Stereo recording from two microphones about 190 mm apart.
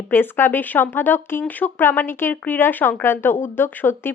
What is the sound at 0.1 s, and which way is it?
Speech, 10° left (ahead or behind).